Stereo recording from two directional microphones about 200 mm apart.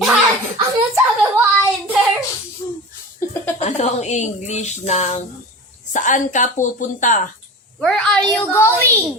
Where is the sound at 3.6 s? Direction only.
35° left (ahead or behind).